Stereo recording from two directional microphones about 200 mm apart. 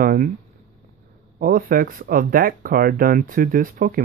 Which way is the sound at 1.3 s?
45° right (ahead or behind).